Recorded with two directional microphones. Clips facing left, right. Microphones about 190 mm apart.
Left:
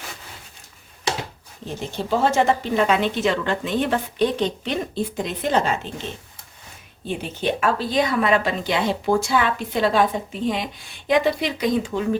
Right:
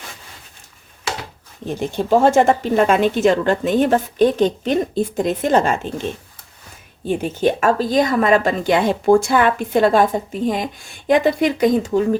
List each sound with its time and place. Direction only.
2.0 s speech: 50° right (ahead or behind)
7.1 s speech: 45° right (ahead or behind)